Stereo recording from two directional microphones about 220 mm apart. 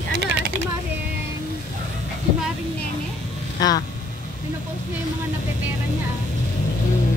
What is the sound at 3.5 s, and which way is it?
Speech, 15° left (ahead or behind).